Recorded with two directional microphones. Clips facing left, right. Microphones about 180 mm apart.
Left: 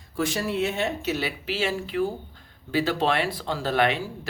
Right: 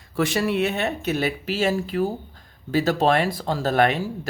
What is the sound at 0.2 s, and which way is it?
Speech, 70° right (ahead or behind).